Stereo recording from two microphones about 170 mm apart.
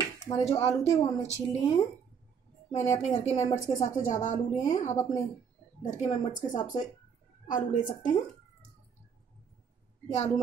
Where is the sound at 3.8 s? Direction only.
50° left (ahead or behind).